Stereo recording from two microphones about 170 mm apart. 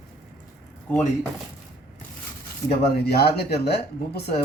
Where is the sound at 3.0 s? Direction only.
70° left (ahead or behind).